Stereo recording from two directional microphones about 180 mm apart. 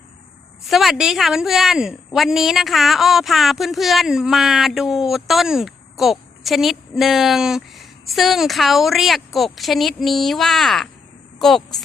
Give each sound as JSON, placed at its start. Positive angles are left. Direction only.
{"t": 0.6, "sound": "a woman's voice", "side_deg": 0}